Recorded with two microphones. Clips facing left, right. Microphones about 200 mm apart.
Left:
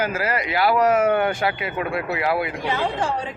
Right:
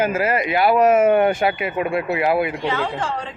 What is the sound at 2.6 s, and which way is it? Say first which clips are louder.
Speech: even; 15° left (ahead or behind).